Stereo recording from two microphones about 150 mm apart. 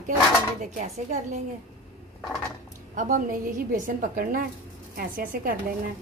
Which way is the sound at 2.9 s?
65° right (ahead or behind).